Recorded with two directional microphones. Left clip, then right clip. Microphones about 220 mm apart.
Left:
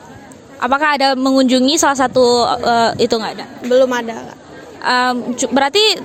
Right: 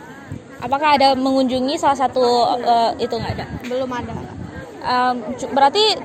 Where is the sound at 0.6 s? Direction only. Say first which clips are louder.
Left 1 dB; 50° left (ahead or behind).